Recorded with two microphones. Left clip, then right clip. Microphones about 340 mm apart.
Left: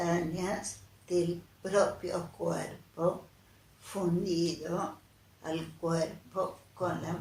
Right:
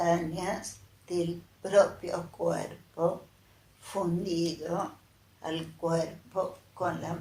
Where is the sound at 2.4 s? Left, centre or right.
Right.